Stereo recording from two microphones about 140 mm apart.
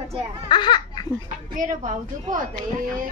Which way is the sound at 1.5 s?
70° right (ahead or behind).